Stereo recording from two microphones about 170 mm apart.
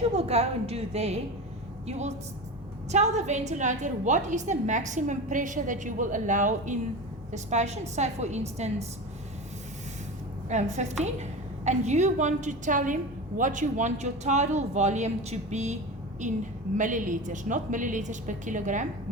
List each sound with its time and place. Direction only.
0.2 s a woman's voice: 40° right (ahead or behind)
10.5 s a woman's voice: 45° right (ahead or behind)